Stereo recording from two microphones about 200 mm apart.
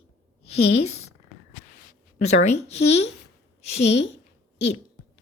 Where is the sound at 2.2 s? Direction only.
35° left (ahead or behind).